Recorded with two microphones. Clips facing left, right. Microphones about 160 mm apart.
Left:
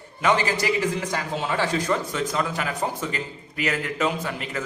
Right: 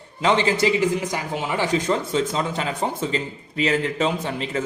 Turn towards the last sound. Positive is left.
turn(degrees=-25)  # may be behind; listen again after turning